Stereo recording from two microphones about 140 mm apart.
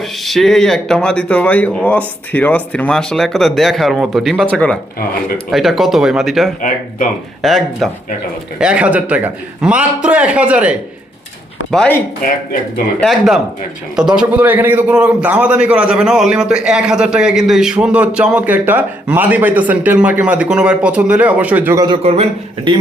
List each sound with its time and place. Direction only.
0.3 s speech: centre (ahead or behind)
12.2 s speech: 90° left
13.0 s speech: centre (ahead or behind)
22.0 s a man's voice: 45° right (ahead or behind)